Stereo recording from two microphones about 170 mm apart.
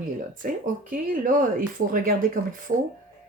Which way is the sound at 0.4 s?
50° right (ahead or behind).